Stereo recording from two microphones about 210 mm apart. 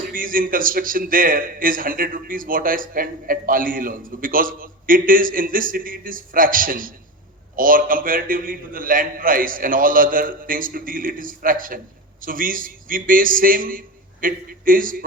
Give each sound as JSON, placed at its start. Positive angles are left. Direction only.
{"t": 0.1, "sound": "a man's voice", "side_deg": -40}